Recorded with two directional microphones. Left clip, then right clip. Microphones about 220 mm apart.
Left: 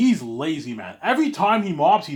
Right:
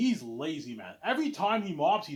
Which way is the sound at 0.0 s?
20° left (ahead or behind).